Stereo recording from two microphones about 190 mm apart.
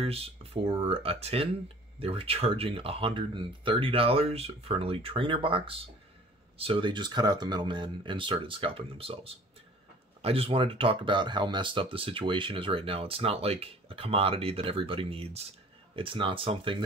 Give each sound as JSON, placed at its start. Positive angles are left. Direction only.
{"t": 0.0, "sound": "speech", "side_deg": -30}